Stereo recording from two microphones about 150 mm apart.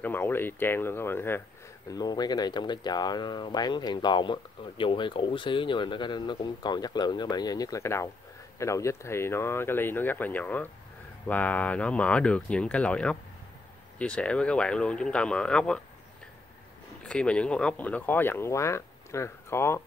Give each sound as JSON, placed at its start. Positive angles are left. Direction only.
{"t": 0.0, "sound": "speech", "side_deg": 15}
{"t": 1.9, "sound": "speech", "side_deg": 25}
{"t": 17.0, "sound": "speech", "side_deg": 5}